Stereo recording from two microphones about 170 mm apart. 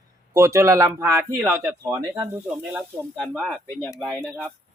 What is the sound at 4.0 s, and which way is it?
Speech, 5° left (ahead or behind).